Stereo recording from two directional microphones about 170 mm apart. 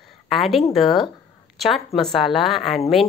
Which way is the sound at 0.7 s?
Centre (ahead or behind).